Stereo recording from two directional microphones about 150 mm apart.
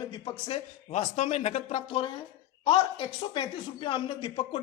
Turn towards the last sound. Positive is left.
turn(degrees=35)  # may be behind; listen again after turning